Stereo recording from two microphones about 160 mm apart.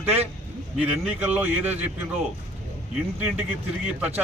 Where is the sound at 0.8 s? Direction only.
10° right (ahead or behind).